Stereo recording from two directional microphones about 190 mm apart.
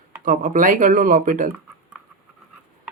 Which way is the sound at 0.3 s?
45° right (ahead or behind).